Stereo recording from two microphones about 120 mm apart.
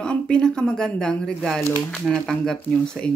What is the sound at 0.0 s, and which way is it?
Speech, 10° left (ahead or behind).